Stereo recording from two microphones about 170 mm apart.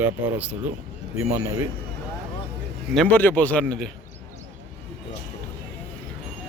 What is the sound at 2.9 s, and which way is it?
Speech, 10° left (ahead or behind).